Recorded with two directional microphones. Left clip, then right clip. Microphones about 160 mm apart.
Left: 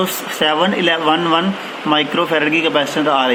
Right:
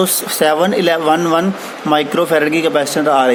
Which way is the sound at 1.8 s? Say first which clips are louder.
Right 2 dB; 70° right (ahead or behind).